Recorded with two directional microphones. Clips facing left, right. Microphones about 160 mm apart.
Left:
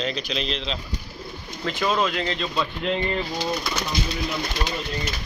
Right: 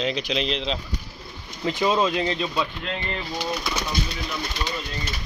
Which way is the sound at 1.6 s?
20° right (ahead or behind).